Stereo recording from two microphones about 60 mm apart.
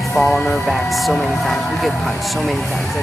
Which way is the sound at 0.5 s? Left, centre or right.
Centre.